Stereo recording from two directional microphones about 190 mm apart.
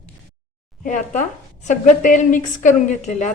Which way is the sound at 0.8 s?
40° left (ahead or behind).